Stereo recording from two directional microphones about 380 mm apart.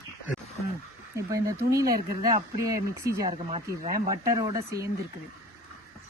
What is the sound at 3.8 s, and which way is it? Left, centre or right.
Speech, right.